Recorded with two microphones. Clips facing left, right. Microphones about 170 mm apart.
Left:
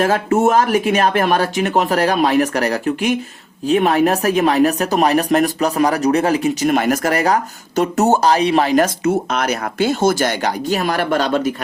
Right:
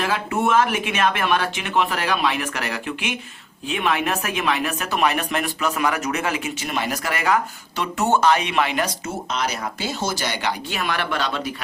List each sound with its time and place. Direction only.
0.0 s speech: 45° left (ahead or behind)
9.3 s speech: 55° left (ahead or behind)